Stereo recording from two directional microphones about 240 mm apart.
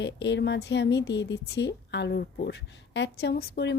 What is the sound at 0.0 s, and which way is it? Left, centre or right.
Speech, left.